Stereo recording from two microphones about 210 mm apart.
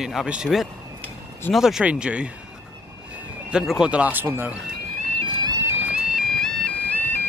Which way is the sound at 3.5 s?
5° right (ahead or behind).